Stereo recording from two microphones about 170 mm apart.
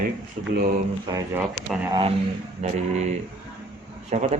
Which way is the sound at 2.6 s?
40° right (ahead or behind).